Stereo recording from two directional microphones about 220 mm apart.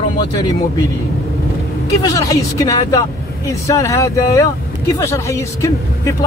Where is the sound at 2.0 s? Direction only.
15° left (ahead or behind).